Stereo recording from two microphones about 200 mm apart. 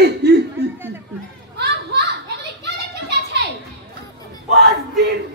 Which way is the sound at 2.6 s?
55° right (ahead or behind).